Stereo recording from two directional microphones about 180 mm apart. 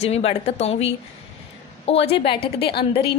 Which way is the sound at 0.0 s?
35° left (ahead or behind).